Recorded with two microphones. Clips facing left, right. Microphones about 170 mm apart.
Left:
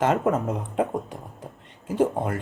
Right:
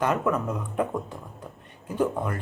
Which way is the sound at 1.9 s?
25° left (ahead or behind).